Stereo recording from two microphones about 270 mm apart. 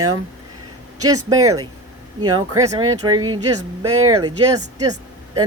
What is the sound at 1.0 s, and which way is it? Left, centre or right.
Speech, right.